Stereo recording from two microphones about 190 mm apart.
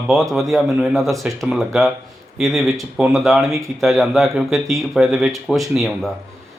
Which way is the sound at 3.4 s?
15° right (ahead or behind).